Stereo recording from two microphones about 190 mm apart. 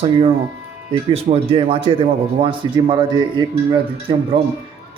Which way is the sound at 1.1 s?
30° right (ahead or behind).